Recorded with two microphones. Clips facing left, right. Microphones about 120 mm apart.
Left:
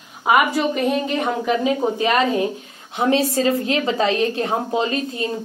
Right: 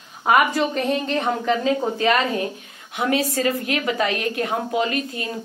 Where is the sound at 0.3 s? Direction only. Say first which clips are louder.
Left 1 dB; 5° left (ahead or behind).